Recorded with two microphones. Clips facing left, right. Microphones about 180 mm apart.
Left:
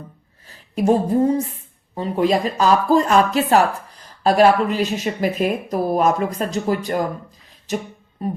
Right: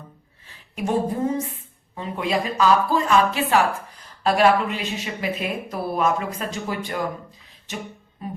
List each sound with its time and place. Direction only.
0.4 s speech: 40° left (ahead or behind)